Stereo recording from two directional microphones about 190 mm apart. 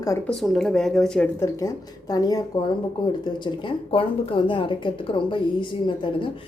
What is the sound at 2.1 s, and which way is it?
A woman's voice, 20° left (ahead or behind).